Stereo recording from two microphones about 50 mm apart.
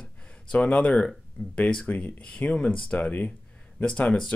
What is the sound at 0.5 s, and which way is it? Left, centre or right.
Speech, centre.